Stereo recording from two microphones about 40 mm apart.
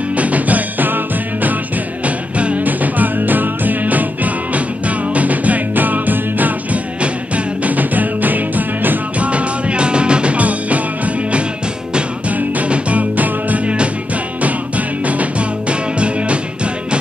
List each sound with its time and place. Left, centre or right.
0.1 s music: right
2.0 s music: right
2.6 s music: right
7.0 s music: right
9.2 s music: right
12.3 s music: right